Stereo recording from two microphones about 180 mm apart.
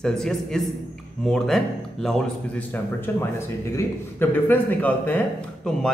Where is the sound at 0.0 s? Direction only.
5° left (ahead or behind).